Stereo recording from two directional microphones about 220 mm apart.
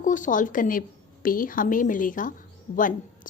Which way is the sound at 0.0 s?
35° left (ahead or behind).